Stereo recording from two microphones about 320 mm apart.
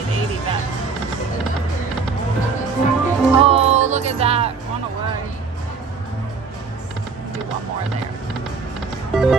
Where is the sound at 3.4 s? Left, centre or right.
Centre.